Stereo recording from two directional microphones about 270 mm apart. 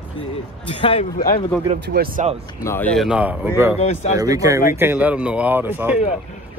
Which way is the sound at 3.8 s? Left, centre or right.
Left.